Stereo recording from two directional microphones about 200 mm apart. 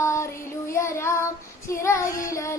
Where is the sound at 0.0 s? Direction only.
15° left (ahead or behind).